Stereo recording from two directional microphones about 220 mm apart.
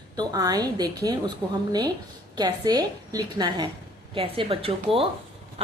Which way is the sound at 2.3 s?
20° right (ahead or behind).